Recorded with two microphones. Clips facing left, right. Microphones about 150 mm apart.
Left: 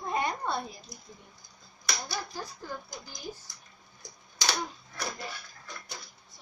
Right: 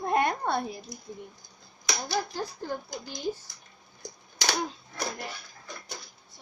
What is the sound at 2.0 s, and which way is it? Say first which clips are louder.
Speech: right 7 dB; 70° right (ahead or behind).